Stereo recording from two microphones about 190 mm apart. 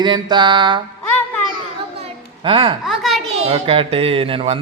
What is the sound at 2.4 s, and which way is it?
Speech, 25° right (ahead or behind).